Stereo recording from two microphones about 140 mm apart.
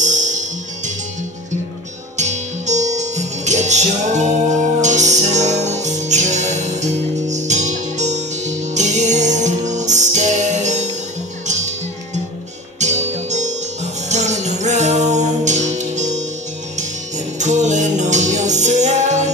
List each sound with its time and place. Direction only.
0.0 s music: 60° right (ahead or behind)
2.1 s music: 55° right (ahead or behind)
17.4 s music: 55° right (ahead or behind)